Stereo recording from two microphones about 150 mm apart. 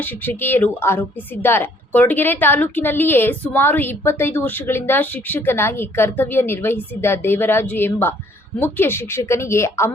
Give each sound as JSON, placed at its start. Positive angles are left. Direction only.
{"t": 0.0, "sound": "a woman's voice", "side_deg": 15}